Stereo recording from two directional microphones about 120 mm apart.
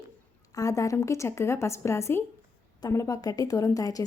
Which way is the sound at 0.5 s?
30° left (ahead or behind).